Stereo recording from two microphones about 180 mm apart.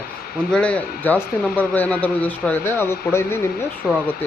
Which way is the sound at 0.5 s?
5° left (ahead or behind).